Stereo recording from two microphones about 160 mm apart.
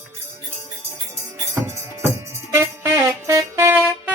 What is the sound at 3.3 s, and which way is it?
Music, 15° right (ahead or behind).